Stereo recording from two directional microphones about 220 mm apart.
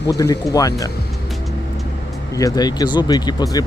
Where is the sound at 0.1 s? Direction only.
15° left (ahead or behind).